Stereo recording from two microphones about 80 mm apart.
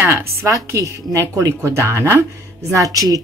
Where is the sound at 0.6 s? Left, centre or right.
Right.